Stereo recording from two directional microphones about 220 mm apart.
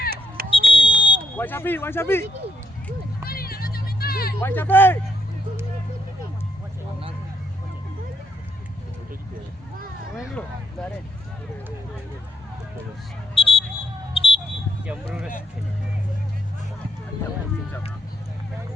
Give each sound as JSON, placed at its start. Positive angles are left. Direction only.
{"t": 0.5, "sound": "smoke detector", "side_deg": 25}
{"t": 1.4, "sound": "a man's voice", "side_deg": 10}
{"t": 3.2, "sound": "music", "side_deg": 45}
{"t": 4.4, "sound": "a man's voice", "side_deg": 10}
{"t": 13.3, "sound": "a sound", "side_deg": 25}
{"t": 14.8, "sound": "speech", "side_deg": -5}